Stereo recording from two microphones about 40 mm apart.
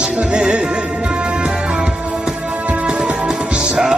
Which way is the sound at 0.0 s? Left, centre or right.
Right.